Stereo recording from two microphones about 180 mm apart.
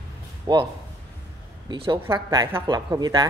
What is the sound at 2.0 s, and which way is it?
A woman's voice, 20° right (ahead or behind).